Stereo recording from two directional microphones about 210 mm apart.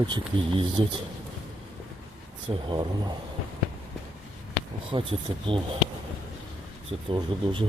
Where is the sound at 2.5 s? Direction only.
25° right (ahead or behind).